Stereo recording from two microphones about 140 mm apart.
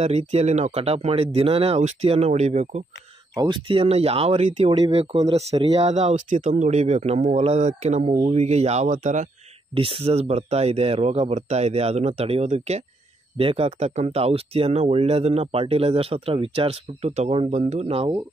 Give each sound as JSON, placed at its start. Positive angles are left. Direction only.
{"t": 0.0, "sound": "speech", "side_deg": -50}
{"t": 3.3, "sound": "speech", "side_deg": -35}
{"t": 9.8, "sound": "speech", "side_deg": -40}
{"t": 13.4, "sound": "speech", "side_deg": -45}